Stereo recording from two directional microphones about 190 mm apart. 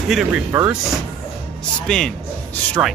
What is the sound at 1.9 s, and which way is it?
Speech, 5° left (ahead or behind).